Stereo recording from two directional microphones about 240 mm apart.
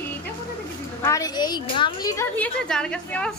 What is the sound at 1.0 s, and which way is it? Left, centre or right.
A woman's voice, centre.